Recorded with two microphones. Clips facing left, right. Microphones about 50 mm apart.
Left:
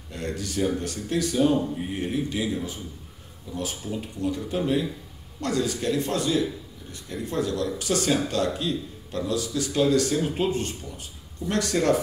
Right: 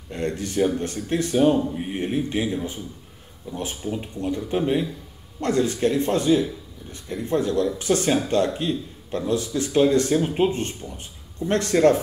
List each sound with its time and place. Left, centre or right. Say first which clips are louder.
0.1 s speech: right 5 dB; right